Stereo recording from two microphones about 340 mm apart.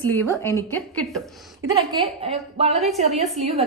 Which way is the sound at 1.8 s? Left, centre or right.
Centre.